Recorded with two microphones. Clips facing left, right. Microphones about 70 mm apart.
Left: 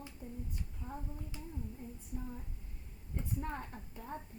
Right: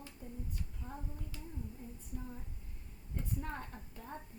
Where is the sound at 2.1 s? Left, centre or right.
Centre.